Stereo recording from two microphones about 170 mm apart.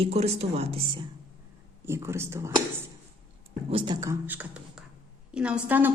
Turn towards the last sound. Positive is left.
turn(degrees=-10)  # may be behind; listen again after turning